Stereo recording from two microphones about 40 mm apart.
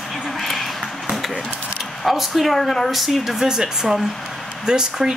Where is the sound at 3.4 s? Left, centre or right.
Centre.